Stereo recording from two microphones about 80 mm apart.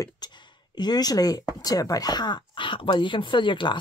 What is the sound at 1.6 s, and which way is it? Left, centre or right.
Speech, left.